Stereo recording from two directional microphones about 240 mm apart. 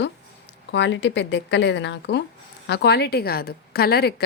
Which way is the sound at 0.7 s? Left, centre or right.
Left.